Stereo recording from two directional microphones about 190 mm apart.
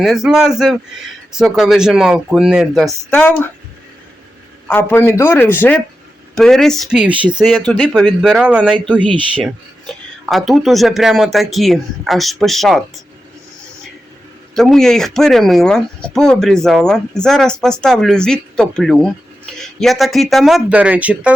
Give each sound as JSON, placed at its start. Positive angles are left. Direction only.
{"t": 0.0, "sound": "speech", "side_deg": 0}
{"t": 4.7, "sound": "speech", "side_deg": 10}
{"t": 7.1, "sound": "speech", "side_deg": -25}
{"t": 7.3, "sound": "speech", "side_deg": -5}
{"t": 8.9, "sound": "speech", "side_deg": 5}
{"t": 10.2, "sound": "speech", "side_deg": 0}
{"t": 14.5, "sound": "speech", "side_deg": 0}